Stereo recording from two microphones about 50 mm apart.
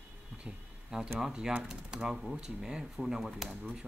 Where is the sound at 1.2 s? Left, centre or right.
Centre.